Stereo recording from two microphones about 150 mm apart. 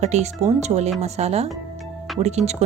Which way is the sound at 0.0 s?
50° right (ahead or behind).